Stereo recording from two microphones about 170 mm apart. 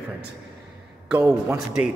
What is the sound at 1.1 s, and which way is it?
Speech, 10° right (ahead or behind).